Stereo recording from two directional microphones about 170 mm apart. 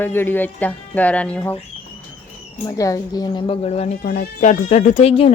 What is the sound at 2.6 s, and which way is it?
Speech, 20° left (ahead or behind).